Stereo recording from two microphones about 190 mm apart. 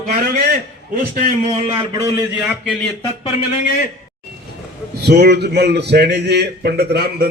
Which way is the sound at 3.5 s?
45° left (ahead or behind).